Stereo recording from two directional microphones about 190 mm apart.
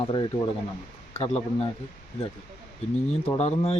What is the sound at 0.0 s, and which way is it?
Speech, 25° left (ahead or behind).